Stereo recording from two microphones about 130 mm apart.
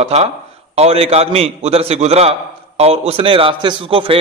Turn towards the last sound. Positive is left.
turn(degrees=-45)  # may be behind; listen again after turning